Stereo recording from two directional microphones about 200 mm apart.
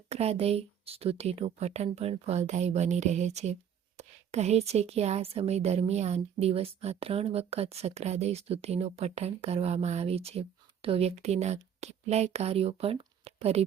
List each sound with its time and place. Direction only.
0.1 s speech: 30° right (ahead or behind)